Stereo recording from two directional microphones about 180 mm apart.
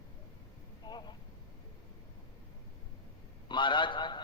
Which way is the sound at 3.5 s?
25° left (ahead or behind).